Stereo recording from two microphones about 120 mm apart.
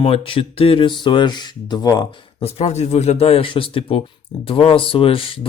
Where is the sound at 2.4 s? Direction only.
60° left (ahead or behind).